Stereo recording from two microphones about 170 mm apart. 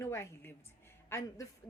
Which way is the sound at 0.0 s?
15° left (ahead or behind).